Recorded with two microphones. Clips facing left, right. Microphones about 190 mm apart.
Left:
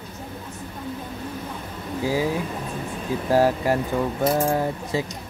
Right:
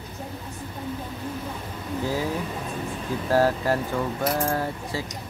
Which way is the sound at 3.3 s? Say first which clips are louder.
Left 2 dB; 15° left (ahead or behind).